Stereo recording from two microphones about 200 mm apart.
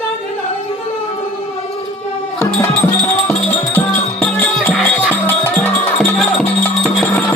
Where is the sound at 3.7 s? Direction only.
10° left (ahead or behind).